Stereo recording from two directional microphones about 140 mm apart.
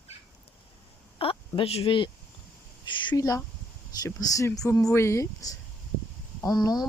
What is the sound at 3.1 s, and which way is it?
Speech, 25° left (ahead or behind).